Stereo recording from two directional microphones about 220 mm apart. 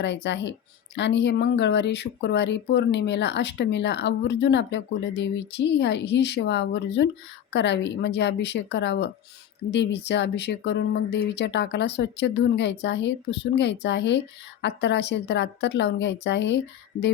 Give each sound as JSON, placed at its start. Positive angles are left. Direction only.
{"t": 0.0, "sound": "speech", "side_deg": 55}